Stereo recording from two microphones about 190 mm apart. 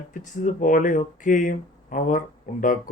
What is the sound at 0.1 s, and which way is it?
Speech, 45° left (ahead or behind).